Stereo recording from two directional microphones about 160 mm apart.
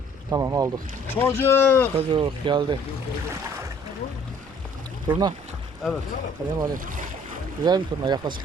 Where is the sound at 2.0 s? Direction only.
35° right (ahead or behind).